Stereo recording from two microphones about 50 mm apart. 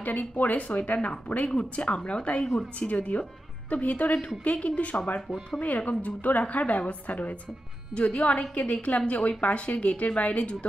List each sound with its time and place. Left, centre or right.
0.0 s a woman's voice: left; by 2.6 s centre
2.9 s a woman's voice: left